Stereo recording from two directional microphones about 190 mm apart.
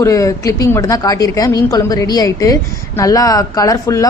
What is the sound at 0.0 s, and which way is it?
Speech, 15° left (ahead or behind).